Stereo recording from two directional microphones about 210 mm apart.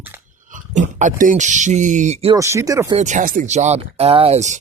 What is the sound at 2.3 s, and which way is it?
Speech, 15° right (ahead or behind).